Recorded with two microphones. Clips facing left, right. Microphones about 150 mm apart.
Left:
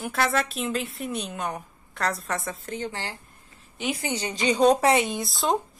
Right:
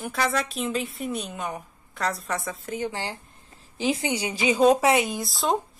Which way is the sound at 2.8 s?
15° right (ahead or behind).